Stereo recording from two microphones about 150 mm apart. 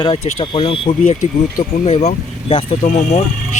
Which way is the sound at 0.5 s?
35° left (ahead or behind).